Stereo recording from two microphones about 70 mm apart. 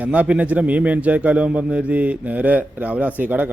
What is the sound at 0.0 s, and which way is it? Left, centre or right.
A man's voice, right.